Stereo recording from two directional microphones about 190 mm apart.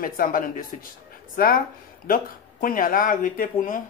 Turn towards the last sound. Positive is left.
turn(degrees=45)  # may be behind; listen again after turning